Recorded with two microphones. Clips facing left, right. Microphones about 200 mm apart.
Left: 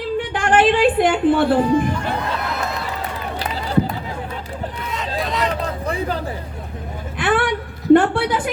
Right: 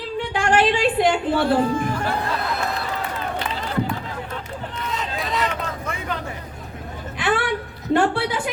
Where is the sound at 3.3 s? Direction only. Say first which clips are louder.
Left 6 dB; 35° left (ahead or behind).